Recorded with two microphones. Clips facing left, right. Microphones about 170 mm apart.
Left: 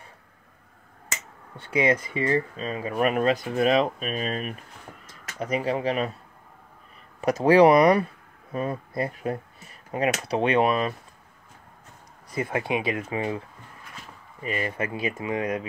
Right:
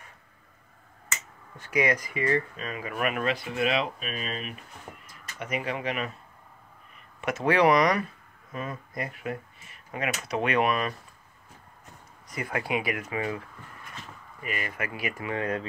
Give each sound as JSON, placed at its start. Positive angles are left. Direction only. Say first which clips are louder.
{"t": 1.0, "sound": "speech", "louder": "left 2 dB", "side_deg": 35}
{"t": 7.2, "sound": "speech", "louder": "left 7 dB", "side_deg": 35}
{"t": 12.3, "sound": "speech", "louder": "left 4 dB", "side_deg": 25}
{"t": 14.4, "sound": "speech", "louder": "left 5 dB", "side_deg": 30}